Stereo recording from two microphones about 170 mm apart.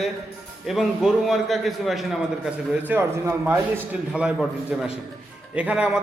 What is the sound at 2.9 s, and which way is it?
Speech, 15° right (ahead or behind).